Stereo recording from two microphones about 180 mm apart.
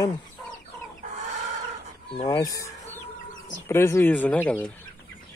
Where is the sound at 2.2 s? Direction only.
20° left (ahead or behind).